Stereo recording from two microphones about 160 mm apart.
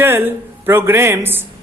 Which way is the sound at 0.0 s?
15° right (ahead or behind).